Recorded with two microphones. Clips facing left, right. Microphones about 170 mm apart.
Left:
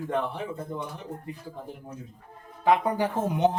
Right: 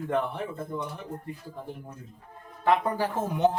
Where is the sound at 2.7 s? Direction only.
15° left (ahead or behind).